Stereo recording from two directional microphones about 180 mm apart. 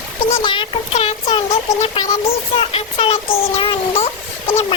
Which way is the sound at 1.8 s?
35° left (ahead or behind).